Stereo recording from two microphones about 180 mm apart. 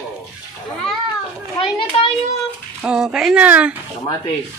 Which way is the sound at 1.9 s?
30° left (ahead or behind).